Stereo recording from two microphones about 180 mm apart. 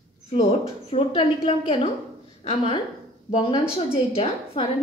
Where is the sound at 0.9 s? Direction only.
30° left (ahead or behind).